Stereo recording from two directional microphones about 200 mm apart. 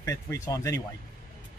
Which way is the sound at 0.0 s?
15° left (ahead or behind).